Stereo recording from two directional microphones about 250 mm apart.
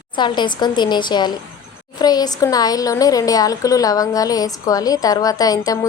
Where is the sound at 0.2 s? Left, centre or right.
Centre.